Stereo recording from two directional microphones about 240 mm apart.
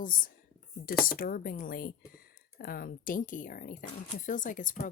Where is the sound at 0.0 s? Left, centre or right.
Left.